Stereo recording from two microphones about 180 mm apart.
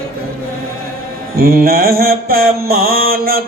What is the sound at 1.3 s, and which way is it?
Mantra, 55° right (ahead or behind).